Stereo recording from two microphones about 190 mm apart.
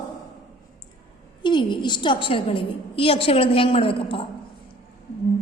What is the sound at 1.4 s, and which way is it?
A woman's voice, 25° left (ahead or behind).